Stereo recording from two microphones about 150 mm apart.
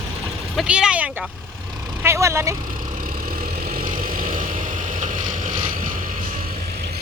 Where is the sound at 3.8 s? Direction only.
65° right (ahead or behind).